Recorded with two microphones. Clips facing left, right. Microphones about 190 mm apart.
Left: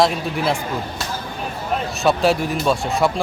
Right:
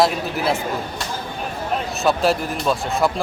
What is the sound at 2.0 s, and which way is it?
Speech, centre (ahead or behind).